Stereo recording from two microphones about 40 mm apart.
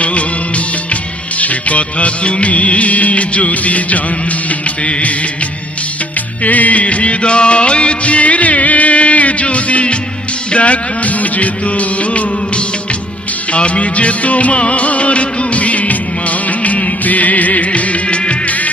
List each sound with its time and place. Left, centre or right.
0.0 s music of bollywood: left
4.4 s music: left
6.4 s music: left